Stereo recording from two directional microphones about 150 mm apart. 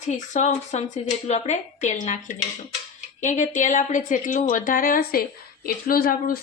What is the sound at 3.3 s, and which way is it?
A woman's voice, 55° left (ahead or behind).